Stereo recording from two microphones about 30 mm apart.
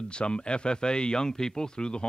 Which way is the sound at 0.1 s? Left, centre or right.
Left.